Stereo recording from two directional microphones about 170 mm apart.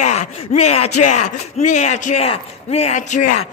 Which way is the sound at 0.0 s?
45° left (ahead or behind).